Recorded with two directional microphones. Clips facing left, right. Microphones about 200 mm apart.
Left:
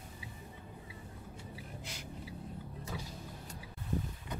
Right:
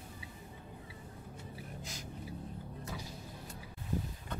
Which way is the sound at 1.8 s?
40° right (ahead or behind).